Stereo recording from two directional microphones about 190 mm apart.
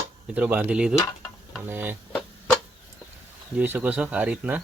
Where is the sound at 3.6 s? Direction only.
10° right (ahead or behind).